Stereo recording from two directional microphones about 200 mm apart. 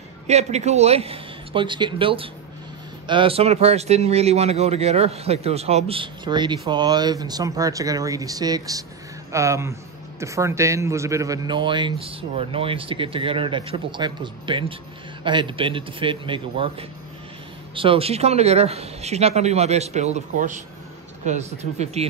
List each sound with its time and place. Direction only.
0.3 s a man's voice: 35° right (ahead or behind)